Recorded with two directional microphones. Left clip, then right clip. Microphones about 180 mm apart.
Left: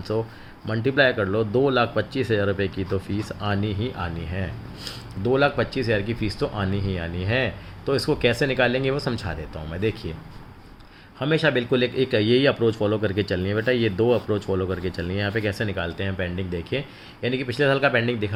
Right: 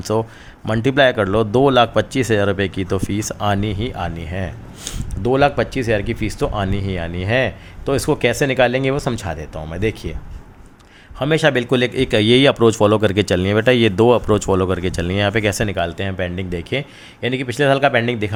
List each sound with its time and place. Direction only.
0.1 s speech: 60° right (ahead or behind)
11.2 s speech: 55° right (ahead or behind)